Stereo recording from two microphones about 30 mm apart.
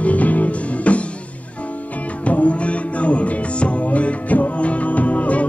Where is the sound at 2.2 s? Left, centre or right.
Left.